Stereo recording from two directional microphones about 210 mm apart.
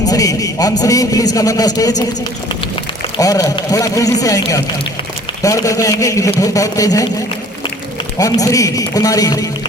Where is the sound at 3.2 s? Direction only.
15° left (ahead or behind).